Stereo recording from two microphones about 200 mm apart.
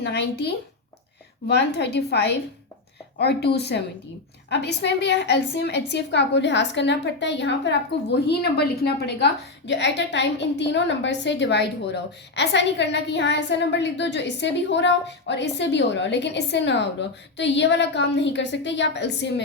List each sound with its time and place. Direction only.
0.0 s a woman's voice: 55° left (ahead or behind)